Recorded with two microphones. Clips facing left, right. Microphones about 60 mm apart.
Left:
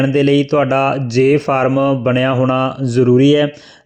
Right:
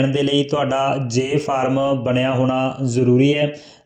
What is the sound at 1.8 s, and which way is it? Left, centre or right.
Speech, left.